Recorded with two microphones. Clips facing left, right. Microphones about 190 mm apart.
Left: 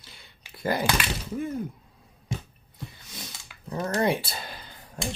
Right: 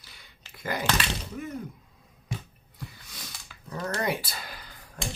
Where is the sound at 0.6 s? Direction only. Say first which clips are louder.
Left 5 dB; 30° left (ahead or behind).